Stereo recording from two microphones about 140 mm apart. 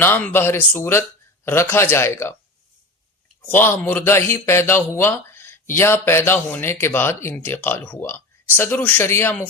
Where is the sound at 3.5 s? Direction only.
15° left (ahead or behind).